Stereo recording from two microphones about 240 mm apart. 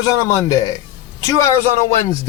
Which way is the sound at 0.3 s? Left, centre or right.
Centre.